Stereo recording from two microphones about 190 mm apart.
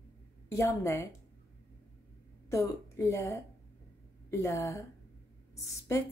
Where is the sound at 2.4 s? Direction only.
15° left (ahead or behind).